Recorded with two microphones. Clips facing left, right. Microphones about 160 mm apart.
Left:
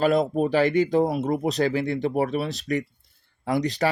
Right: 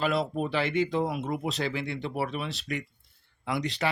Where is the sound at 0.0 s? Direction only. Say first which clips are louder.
Left 7 dB; 40° left (ahead or behind).